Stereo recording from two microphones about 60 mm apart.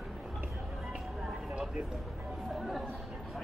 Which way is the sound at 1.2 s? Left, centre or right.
Centre.